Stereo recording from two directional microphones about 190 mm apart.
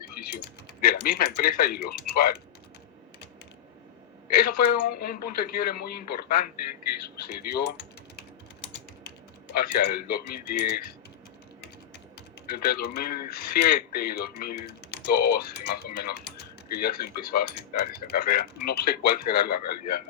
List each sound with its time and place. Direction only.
0.2 s typing: 55° left (ahead or behind)
0.8 s speech: 50° left (ahead or behind)
4.3 s speech: 55° left (ahead or behind)
9.6 s speech: 55° left (ahead or behind)
12.5 s speech: 55° left (ahead or behind)